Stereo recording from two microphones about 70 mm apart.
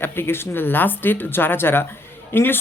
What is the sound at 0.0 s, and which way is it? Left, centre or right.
Speech, left.